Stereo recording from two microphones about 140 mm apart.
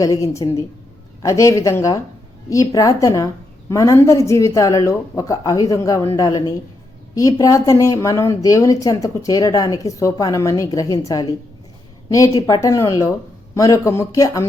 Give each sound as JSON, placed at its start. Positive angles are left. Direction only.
{"t": 0.0, "sound": "speech", "side_deg": 25}